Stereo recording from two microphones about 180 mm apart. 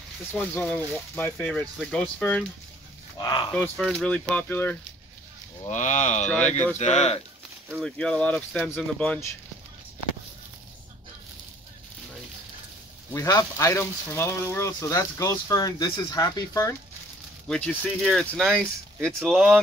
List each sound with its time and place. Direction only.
0.3 s speech: 5° left (ahead or behind)
3.2 s speech: 25° left (ahead or behind)
3.5 s speech: 5° left (ahead or behind)
5.7 s speech: 45° left (ahead or behind)
7.8 s speech: 5° left (ahead or behind)
13.1 s speech: 20° left (ahead or behind)
17.5 s speech: centre (ahead or behind)